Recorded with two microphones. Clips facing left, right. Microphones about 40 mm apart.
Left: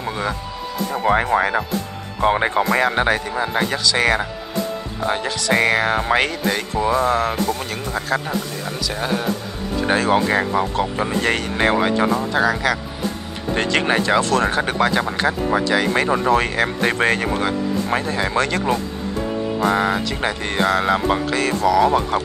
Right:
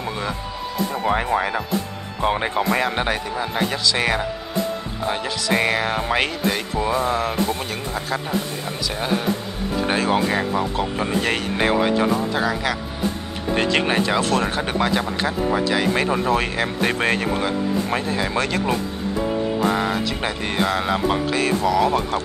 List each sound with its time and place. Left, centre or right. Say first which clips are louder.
0.0 s music: left 2 dB; centre
0.9 s speech: left 4 dB; centre
5.0 s speech: left 3 dB; centre
9.8 s speech: left 3 dB; centre
10.2 s speech: left 2 dB; centre
11.0 s speech: left 1 dB; centre
19.7 s speech: left 3 dB; centre